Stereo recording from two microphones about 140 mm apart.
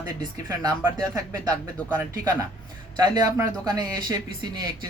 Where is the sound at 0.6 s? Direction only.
25° right (ahead or behind).